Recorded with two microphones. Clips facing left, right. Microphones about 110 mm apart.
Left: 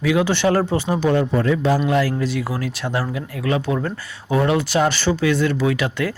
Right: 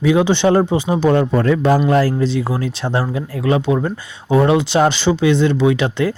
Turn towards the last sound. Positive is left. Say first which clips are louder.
# right 5 dB
turn(degrees=-25)  # may be behind; listen again after turning